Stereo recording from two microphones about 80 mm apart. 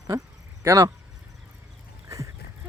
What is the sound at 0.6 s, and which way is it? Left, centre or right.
Speech, right.